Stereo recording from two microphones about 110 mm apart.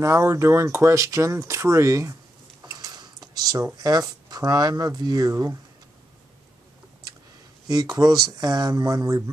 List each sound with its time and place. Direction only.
0.0 s speech: 25° right (ahead or behind)
2.6 s a sound: 40° right (ahead or behind)
3.6 s speech: 35° right (ahead or behind)
5.3 s speech: 25° right (ahead or behind)
7.6 s speech: 35° right (ahead or behind)